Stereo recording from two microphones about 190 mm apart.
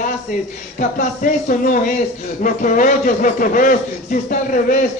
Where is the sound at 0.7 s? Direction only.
45° left (ahead or behind).